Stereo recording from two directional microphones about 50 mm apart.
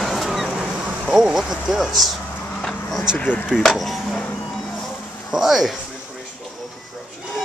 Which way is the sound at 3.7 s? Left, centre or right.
Centre.